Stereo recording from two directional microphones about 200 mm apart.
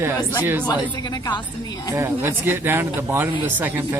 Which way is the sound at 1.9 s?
10° right (ahead or behind).